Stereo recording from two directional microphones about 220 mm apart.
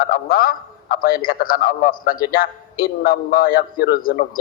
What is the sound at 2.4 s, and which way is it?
A man's voice, 40° left (ahead or behind).